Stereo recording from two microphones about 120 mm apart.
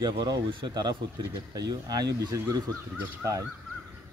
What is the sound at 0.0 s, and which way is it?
Speech, 35° right (ahead or behind).